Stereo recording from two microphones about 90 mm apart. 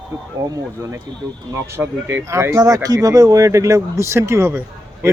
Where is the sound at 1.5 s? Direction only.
30° right (ahead or behind).